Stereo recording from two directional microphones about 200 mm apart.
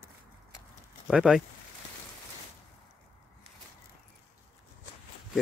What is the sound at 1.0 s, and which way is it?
Speech, 5° right (ahead or behind).